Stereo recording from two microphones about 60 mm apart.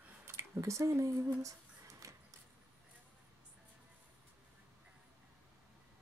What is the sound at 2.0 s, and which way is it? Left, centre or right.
Vehicle, right.